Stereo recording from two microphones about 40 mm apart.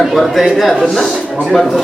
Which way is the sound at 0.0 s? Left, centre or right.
Centre.